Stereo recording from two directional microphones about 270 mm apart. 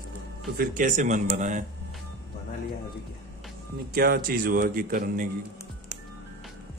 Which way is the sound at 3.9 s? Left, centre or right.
Right.